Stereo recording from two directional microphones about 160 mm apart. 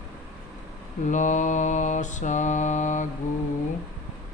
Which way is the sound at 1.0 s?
50° left (ahead or behind).